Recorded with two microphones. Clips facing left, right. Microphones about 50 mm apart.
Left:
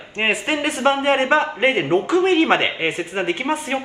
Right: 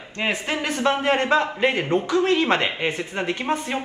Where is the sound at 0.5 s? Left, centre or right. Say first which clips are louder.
Left 2 dB; left.